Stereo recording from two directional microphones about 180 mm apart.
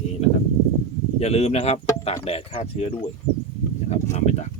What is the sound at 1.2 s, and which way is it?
Speech, 35° left (ahead or behind).